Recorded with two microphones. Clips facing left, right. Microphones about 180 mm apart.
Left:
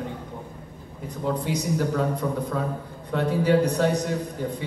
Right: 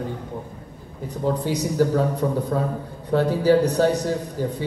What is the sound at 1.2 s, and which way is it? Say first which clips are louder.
A man's voice: right 3 dB; 35° right (ahead or behind).